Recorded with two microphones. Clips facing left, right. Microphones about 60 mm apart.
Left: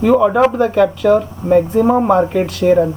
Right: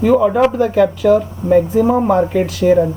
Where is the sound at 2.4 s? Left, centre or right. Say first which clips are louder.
Even; centre.